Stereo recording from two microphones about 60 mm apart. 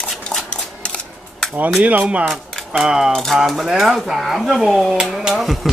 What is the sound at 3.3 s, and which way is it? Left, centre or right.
Speech, centre.